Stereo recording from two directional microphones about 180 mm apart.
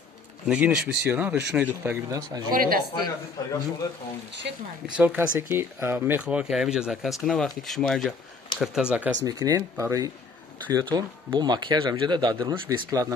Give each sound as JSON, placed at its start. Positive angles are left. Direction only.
{"t": 0.5, "sound": "speech", "side_deg": -5}
{"t": 2.5, "sound": "speech", "side_deg": -55}
{"t": 3.4, "sound": "a man's voice", "side_deg": 20}
{"t": 4.9, "sound": "speech", "side_deg": -10}
{"t": 9.2, "sound": "speech", "side_deg": -20}